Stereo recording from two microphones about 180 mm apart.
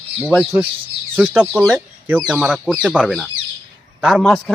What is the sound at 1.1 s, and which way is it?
A man's voice, 10° right (ahead or behind).